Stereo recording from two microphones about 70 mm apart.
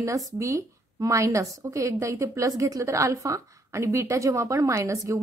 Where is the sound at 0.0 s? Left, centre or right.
Right.